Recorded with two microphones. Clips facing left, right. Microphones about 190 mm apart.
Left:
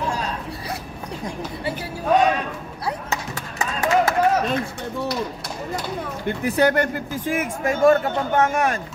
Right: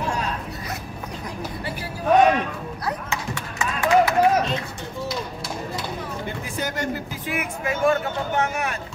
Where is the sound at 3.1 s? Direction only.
40° left (ahead or behind).